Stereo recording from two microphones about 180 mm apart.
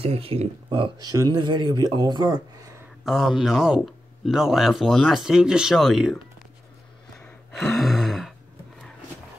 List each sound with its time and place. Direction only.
0.0 s speech: 30° right (ahead or behind)
3.1 s speech: centre (ahead or behind)
7.2 s gasp: centre (ahead or behind)